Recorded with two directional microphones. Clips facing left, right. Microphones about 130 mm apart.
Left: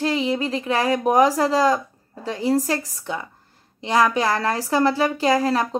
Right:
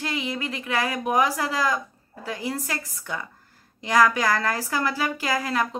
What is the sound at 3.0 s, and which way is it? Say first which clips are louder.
A woman's voice: left 4 dB; 25° left (ahead or behind).